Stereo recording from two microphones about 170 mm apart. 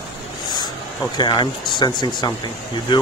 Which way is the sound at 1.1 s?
25° left (ahead or behind).